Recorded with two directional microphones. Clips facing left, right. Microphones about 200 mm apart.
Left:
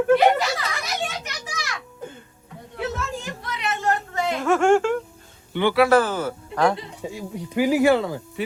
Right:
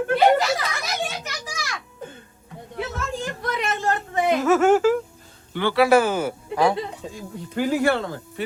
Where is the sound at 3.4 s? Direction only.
50° right (ahead or behind).